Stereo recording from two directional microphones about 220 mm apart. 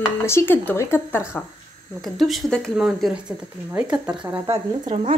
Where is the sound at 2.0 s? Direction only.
Centre (ahead or behind).